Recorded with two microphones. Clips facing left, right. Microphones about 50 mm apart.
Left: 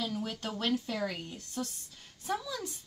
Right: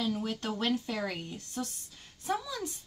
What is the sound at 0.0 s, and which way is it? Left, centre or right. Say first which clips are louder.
Speech: right 3 dB; centre.